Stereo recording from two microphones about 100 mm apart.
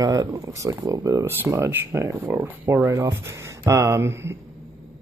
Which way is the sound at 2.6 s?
30° right (ahead or behind).